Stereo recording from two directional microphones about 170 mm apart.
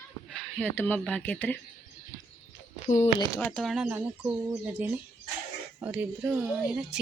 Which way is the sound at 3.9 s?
10° right (ahead or behind).